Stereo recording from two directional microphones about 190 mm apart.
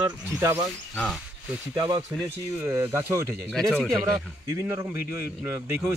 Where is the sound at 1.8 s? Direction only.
25° right (ahead or behind).